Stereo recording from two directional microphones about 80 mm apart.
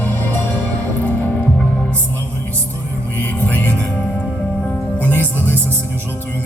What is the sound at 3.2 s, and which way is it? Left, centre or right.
Music, left.